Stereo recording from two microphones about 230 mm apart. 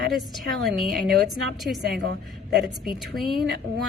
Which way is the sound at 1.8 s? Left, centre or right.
Right.